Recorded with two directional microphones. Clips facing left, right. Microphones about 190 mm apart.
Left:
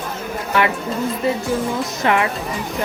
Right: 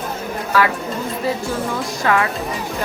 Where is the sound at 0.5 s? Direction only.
25° left (ahead or behind).